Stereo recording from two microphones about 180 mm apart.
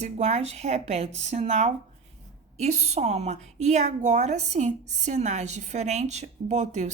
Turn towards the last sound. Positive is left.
turn(degrees=-40)  # may be behind; listen again after turning